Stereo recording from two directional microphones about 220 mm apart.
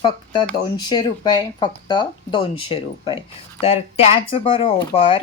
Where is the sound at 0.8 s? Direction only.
20° left (ahead or behind).